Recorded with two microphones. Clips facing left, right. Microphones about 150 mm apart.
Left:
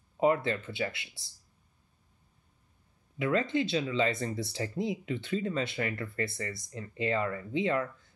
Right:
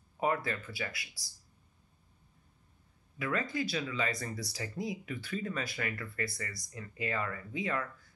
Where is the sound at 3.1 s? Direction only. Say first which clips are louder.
Left 6 dB; 25° left (ahead or behind).